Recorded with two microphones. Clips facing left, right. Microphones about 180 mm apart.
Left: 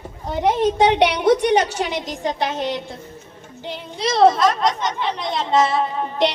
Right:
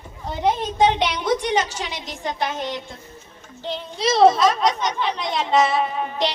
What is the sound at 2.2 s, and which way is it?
Speech, 35° left (ahead or behind).